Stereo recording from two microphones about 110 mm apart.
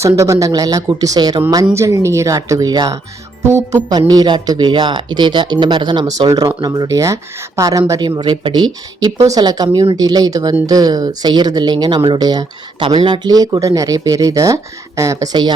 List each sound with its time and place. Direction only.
0.0 s speech: 25° right (ahead or behind)
4.1 s speech: 40° right (ahead or behind)
9.1 s speech: 30° right (ahead or behind)